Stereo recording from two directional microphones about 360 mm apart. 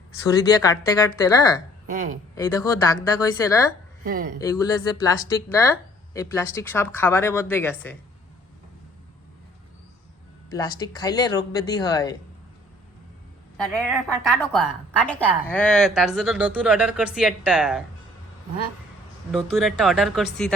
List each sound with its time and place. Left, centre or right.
0.3 s speech: centre
1.9 s speech: right
2.3 s speech: centre
4.0 s speech: right
4.4 s speech: centre
10.5 s speech: centre
14.5 s a woman's voice: centre
19.3 s a woman's voice: centre